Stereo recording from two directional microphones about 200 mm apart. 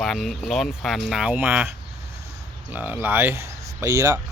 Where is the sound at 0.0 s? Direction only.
Centre (ahead or behind).